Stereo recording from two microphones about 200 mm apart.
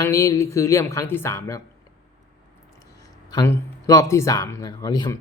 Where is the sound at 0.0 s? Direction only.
15° left (ahead or behind).